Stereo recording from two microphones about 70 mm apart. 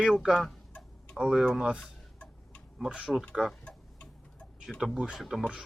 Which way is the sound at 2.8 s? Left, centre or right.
Centre.